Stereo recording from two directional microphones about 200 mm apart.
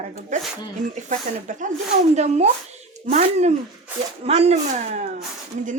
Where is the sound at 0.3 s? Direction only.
40° right (ahead or behind).